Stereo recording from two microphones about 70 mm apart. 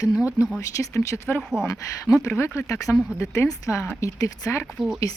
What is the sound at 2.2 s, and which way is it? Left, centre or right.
Speech, left.